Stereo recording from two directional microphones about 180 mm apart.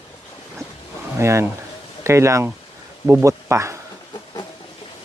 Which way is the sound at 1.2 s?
15° right (ahead or behind).